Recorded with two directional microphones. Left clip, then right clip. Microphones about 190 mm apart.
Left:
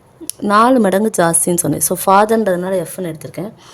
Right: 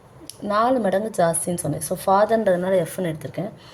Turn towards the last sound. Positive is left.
turn(degrees=25)  # may be behind; listen again after turning